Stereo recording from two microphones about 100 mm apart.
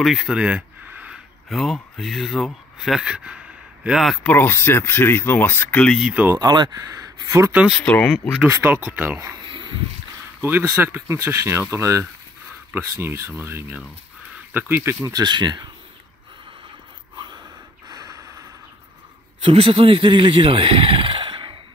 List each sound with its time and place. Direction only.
0.0 s a sound: 5° right (ahead or behind)
1.1 s speech: centre (ahead or behind)
4.2 s speech: 20° left (ahead or behind)
5.9 s speech: 5° right (ahead or behind)
6.3 s speech: 45° right (ahead or behind)
7.8 s speech: 10° left (ahead or behind)
8.6 s speech: 15° right (ahead or behind)
9.5 s a sound: 50° right (ahead or behind)
10.4 s speech: 20° right (ahead or behind)
15.2 s speech: 45° right (ahead or behind)
17.8 s snort: 35° right (ahead or behind)
19.4 s speech: 65° right (ahead or behind)